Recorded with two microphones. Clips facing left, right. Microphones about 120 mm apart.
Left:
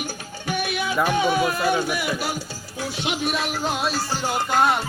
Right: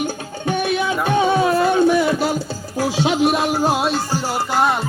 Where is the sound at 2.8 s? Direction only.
90° right.